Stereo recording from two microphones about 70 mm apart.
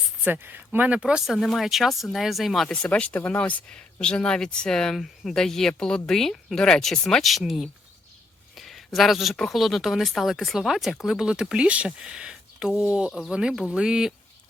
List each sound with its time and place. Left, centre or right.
0.3 s speech: right; by 2.6 s centre
2.9 s speech: centre
8.5 s a sound: centre
9.3 s speech: centre